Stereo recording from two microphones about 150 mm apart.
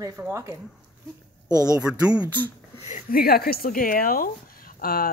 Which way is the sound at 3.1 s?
90° left.